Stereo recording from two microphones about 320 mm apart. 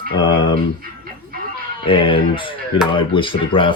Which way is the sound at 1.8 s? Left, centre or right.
Centre.